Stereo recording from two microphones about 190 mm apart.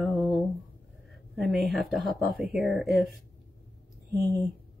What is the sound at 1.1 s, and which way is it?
Speech, centre (ahead or behind).